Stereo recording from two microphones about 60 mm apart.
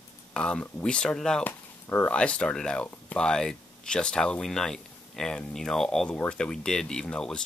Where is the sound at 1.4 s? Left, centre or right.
Left.